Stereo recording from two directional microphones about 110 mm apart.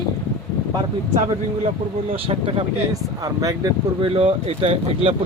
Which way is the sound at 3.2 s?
35° right (ahead or behind).